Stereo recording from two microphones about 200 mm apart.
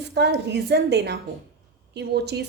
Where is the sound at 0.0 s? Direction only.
55° right (ahead or behind).